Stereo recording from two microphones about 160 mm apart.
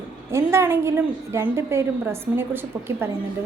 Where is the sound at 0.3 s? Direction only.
15° right (ahead or behind).